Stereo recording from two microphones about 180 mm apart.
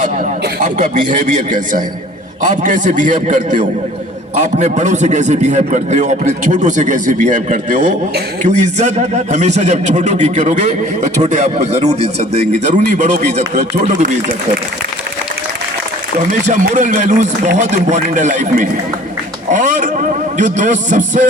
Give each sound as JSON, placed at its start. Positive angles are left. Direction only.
{"t": 0.0, "sound": "a man's voice", "side_deg": -45}
{"t": 16.5, "sound": "speech", "side_deg": -45}